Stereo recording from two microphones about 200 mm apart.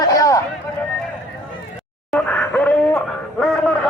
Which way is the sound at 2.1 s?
5° left (ahead or behind).